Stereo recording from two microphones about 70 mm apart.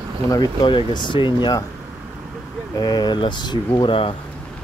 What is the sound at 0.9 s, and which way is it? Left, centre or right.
Speech, left.